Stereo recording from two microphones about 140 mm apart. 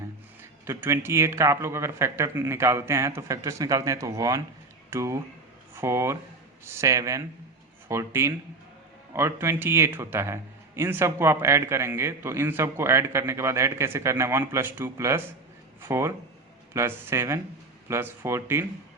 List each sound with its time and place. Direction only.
0.6 s a man's voice: 20° right (ahead or behind)